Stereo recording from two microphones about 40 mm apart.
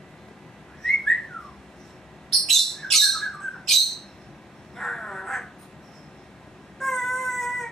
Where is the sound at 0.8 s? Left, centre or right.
Centre.